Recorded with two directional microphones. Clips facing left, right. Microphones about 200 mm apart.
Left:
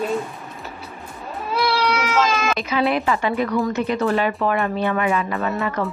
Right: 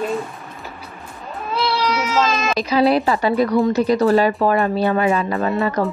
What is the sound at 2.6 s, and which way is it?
Speech, 35° right (ahead or behind).